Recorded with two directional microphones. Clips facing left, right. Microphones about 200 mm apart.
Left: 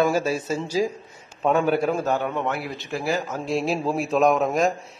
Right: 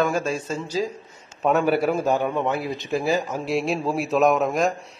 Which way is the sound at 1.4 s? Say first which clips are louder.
Right 1 dB; 5° right (ahead or behind).